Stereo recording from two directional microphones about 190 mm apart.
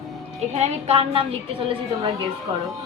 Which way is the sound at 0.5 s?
35° right (ahead or behind).